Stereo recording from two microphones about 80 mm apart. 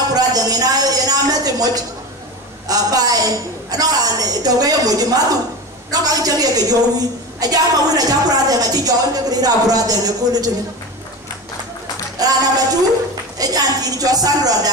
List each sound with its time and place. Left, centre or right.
0.1 s a sound: right
2.7 s a woman's voice: right
12.2 s a woman's voice: right